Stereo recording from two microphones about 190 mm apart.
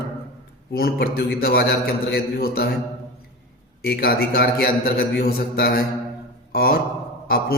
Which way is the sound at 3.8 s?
55° left (ahead or behind).